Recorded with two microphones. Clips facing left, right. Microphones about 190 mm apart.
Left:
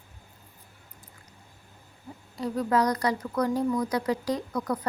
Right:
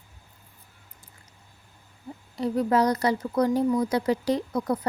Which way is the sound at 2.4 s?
25° right (ahead or behind).